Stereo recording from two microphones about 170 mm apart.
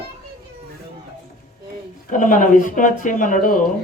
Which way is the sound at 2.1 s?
50° left (ahead or behind).